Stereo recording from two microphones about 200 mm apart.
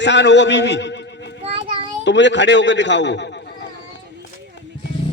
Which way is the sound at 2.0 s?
60° left (ahead or behind).